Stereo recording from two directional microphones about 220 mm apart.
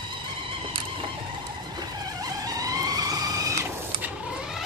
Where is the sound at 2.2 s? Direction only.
15° right (ahead or behind).